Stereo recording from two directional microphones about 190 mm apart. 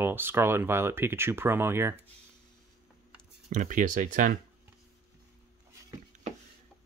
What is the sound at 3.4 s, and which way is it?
Speech, 45° right (ahead or behind).